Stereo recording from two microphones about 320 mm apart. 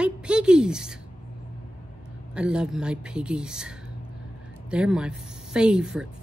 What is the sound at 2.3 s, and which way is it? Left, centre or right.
A woman's voice, centre.